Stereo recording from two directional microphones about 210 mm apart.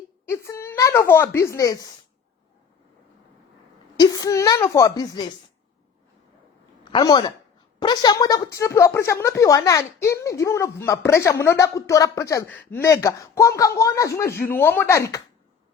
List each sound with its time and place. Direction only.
0.3 s a sound: 15° left (ahead or behind)
3.9 s a woman's voice: 20° left (ahead or behind)
6.8 s a woman's voice: 20° left (ahead or behind)